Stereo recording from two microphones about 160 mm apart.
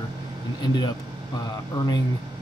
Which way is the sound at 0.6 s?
25° left (ahead or behind).